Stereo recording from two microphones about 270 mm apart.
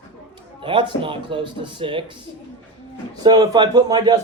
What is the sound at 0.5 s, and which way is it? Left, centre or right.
Speech, centre.